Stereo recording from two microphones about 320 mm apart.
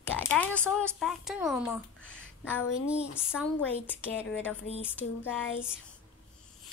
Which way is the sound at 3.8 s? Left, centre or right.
Centre.